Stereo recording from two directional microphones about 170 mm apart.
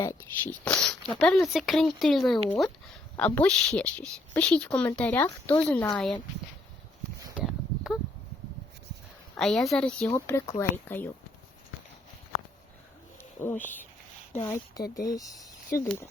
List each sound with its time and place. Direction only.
0.0 s speech: 15° left (ahead or behind)
7.3 s a sound: 5° right (ahead or behind)
9.3 s speech: 5° left (ahead or behind)
10.2 s speech: 15° left (ahead or behind)
13.1 s speech: 10° left (ahead or behind)